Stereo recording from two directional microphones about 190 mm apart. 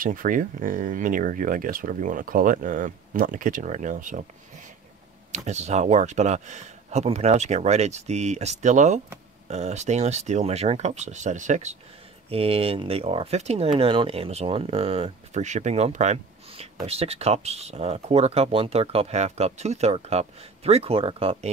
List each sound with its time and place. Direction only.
0.0 s speech: 45° right (ahead or behind)
5.3 s speech: 40° right (ahead or behind)